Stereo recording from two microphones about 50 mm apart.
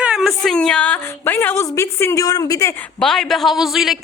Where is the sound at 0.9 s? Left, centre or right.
Left.